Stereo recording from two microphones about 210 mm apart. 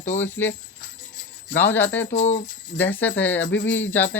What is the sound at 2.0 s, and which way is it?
Speech, 35° left (ahead or behind).